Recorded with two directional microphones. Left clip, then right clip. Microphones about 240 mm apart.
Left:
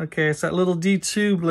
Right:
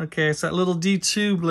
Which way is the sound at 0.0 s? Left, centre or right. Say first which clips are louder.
Left 1 dB; centre.